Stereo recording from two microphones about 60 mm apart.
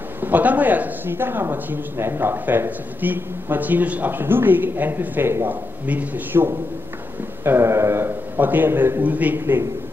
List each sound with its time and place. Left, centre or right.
0.2 s speech: right
5.9 s a man's voice: right
7.4 s a sound: right
8.4 s speech: right
9.0 s a man's voice: right